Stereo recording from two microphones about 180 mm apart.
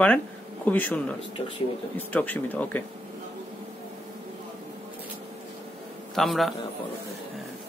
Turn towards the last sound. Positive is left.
turn(degrees=0)  # may be behind; listen again after turning